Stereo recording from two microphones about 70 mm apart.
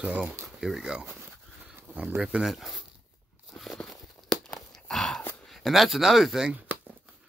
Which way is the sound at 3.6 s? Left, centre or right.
Centre.